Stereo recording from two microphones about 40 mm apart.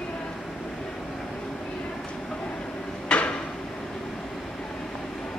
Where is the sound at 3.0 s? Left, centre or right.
Left.